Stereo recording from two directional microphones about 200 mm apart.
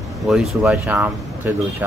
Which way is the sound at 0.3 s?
Centre (ahead or behind).